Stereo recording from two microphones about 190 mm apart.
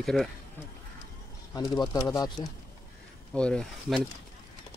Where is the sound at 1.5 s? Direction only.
20° left (ahead or behind).